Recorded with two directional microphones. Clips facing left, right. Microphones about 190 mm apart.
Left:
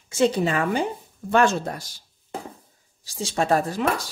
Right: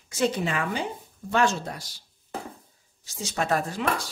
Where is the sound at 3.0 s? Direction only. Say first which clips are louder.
Left 5 dB; 30° left (ahead or behind).